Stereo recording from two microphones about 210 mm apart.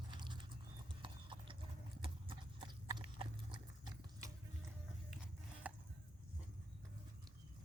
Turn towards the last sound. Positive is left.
turn(degrees=-5)  # may be behind; listen again after turning